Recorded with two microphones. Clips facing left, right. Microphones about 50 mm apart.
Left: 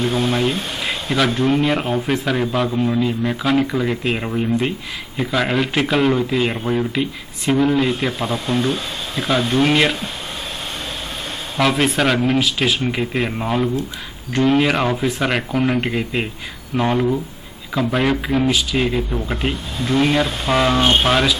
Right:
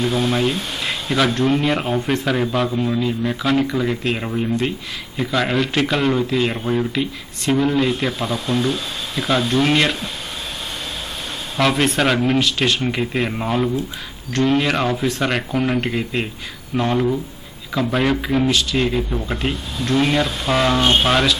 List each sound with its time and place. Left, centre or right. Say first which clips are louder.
0.0 s speech: even; left
0.9 s speech: even; centre
8.3 s speech: left 1 dB; centre
8.6 s speech: left 1 dB; left
9.5 s speech: left 2 dB; centre
11.5 s speech: even; centre